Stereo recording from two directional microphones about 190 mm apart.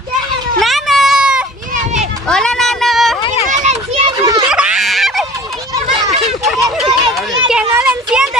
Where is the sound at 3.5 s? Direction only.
35° right (ahead or behind).